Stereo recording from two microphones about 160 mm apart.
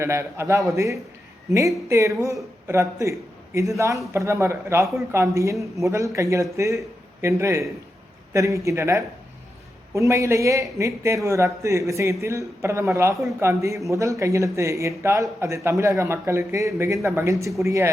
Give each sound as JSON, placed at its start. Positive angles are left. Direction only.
{"t": 0.0, "sound": "a man's voice", "side_deg": -15}